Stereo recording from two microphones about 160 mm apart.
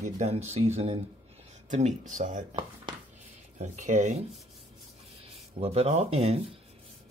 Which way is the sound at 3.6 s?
50° right (ahead or behind).